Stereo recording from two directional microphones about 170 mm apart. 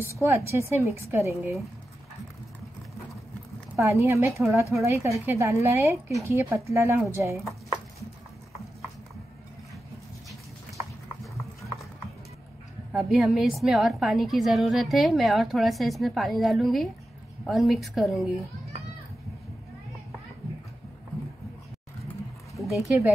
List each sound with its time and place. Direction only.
0.0 s a woman's voice: 15° right (ahead or behind)
3.7 s a woman's voice: 15° right (ahead or behind)
12.9 s a woman's voice: centre (ahead or behind)
22.6 s a sound: centre (ahead or behind)